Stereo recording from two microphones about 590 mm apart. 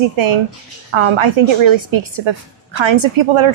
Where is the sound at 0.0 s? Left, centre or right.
Right.